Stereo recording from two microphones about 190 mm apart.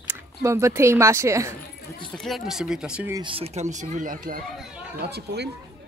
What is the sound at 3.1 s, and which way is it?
Speech, 25° right (ahead or behind).